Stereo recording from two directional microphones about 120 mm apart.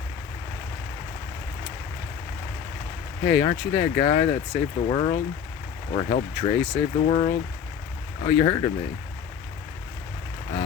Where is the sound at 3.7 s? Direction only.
35° left (ahead or behind).